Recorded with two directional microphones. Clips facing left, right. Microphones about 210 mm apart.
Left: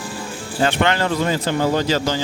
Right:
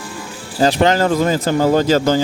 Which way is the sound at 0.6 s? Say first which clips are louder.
Right 5 dB; 35° right (ahead or behind).